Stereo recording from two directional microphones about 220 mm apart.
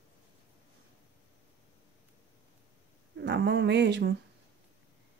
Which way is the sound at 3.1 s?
50° right (ahead or behind).